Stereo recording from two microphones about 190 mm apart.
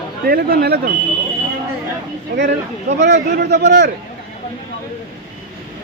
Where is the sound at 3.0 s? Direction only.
60° right (ahead or behind).